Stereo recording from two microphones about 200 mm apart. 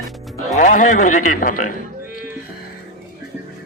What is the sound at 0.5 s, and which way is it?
A man's voice, 40° left (ahead or behind).